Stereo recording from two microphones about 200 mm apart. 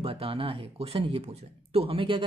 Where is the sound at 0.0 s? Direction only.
30° right (ahead or behind).